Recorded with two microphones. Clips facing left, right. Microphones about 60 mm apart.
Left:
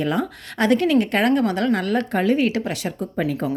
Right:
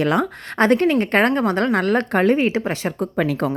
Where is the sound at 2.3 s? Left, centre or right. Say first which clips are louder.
Right 1 dB; right.